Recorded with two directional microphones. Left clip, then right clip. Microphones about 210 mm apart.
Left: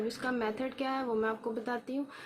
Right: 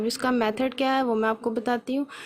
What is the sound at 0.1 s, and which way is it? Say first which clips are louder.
Speech: right 9 dB; 50° right (ahead or behind).